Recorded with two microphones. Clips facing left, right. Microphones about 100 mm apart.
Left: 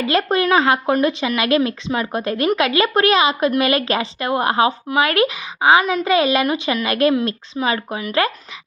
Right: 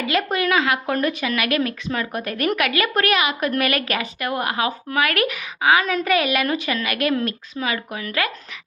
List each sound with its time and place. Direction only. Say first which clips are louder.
0.1 s speech: left 4 dB; 35° left (ahead or behind)
0.9 s a woman's voice: left 4 dB; 20° left (ahead or behind)